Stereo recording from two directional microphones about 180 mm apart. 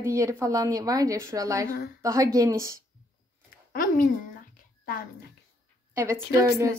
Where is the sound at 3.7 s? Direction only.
50° left (ahead or behind).